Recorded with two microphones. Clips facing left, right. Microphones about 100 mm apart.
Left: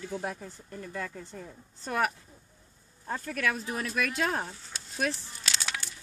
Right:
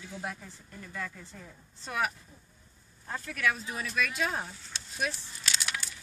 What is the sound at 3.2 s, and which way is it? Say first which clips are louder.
Speech: even; 45° left (ahead or behind).